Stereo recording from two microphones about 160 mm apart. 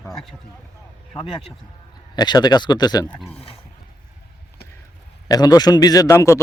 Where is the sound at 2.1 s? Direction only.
25° left (ahead or behind).